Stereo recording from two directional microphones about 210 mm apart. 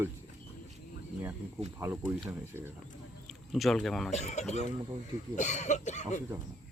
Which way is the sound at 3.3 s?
Centre (ahead or behind).